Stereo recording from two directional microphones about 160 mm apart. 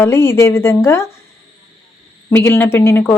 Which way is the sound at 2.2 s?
15° left (ahead or behind).